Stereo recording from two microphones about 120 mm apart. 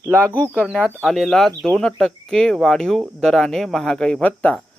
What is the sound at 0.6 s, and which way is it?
Speech, centre (ahead or behind).